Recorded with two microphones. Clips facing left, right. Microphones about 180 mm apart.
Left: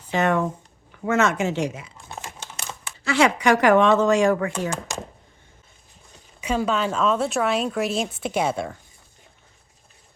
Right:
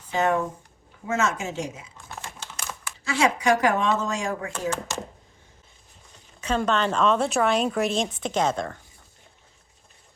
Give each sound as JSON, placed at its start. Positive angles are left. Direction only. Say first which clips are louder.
{"t": 0.1, "sound": "speech", "louder": "left 2 dB", "side_deg": 75}
{"t": 3.0, "sound": "speech", "louder": "left 4 dB", "side_deg": 70}
{"t": 6.4, "sound": "a woman's voice", "louder": "left 1 dB", "side_deg": 10}